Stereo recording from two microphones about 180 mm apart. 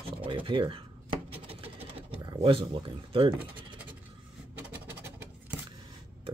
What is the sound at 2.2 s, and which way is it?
Speech, 30° right (ahead or behind).